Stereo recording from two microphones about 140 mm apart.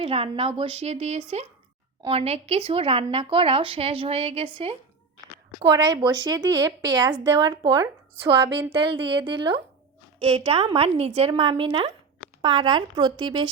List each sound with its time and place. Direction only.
0.0 s speech: 40° right (ahead or behind); by 8.3 s 25° right (ahead or behind)
8.7 s speech: 35° right (ahead or behind)